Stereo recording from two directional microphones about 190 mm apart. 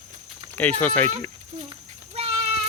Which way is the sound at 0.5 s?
10° left (ahead or behind).